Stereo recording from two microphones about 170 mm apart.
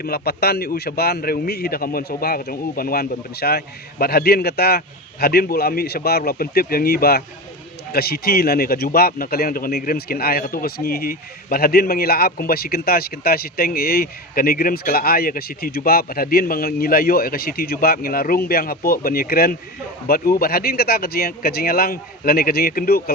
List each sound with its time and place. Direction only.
0.0 s speech: 65° left (ahead or behind)